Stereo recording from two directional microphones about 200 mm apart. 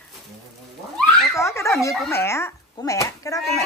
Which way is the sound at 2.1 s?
10° left (ahead or behind).